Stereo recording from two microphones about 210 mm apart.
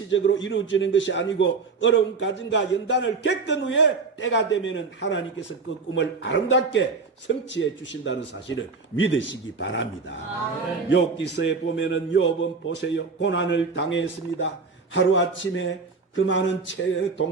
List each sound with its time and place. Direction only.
0.1 s a man's voice: 60° left (ahead or behind)